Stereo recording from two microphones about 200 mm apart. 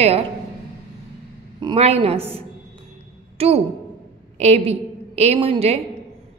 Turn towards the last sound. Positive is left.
turn(degrees=-30)  # may be behind; listen again after turning